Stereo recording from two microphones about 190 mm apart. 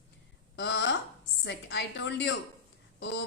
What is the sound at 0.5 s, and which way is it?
A woman's voice, 75° left (ahead or behind).